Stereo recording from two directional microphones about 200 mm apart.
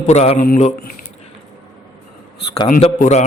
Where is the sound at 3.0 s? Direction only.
35° left (ahead or behind).